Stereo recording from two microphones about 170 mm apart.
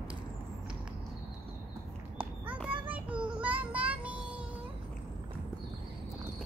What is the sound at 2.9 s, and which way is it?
Child singing, 10° right (ahead or behind).